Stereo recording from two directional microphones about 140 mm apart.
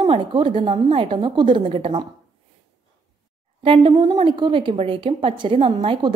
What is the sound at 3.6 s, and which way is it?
A woman's voice, 40° right (ahead or behind).